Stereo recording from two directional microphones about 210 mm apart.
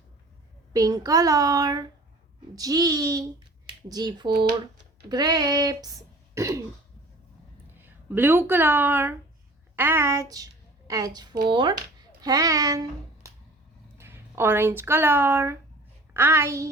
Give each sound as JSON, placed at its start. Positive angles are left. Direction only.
{"t": 0.7, "sound": "speech", "side_deg": -15}
{"t": 7.8, "sound": "a woman's voice", "side_deg": -10}